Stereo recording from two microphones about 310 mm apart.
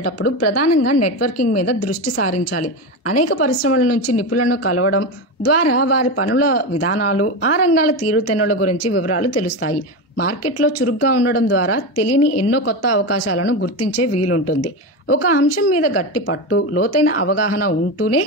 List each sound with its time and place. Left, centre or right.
0.2 s a woman's voice: left